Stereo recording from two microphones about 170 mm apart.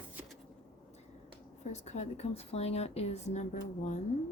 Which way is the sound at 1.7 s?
40° left (ahead or behind).